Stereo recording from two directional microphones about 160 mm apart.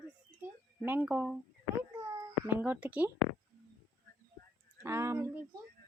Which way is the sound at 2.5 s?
10° right (ahead or behind).